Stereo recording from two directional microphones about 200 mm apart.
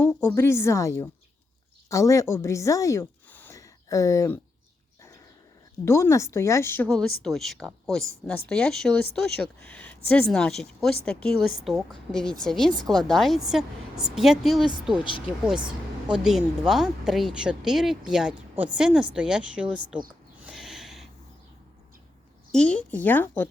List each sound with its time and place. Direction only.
0.2 s a woman's voice: 15° left (ahead or behind)
5.8 s a woman's voice: 15° left (ahead or behind); by 20.0 s 5° right (ahead or behind)
20.4 s a sound: centre (ahead or behind)
22.5 s a woman's voice: 5° left (ahead or behind)